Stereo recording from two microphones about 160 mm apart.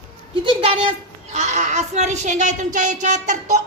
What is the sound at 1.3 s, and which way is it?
Speech, 50° right (ahead or behind).